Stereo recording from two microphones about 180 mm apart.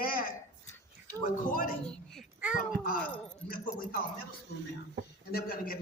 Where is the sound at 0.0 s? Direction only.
50° left (ahead or behind).